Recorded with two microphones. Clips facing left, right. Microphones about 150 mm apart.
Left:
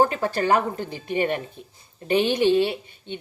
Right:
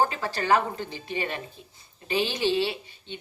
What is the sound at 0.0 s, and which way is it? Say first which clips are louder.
Speech: left 5 dB; 50° left (ahead or behind).